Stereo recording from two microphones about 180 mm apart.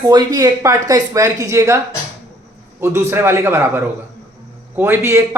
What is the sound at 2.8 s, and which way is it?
A man's voice, 15° right (ahead or behind).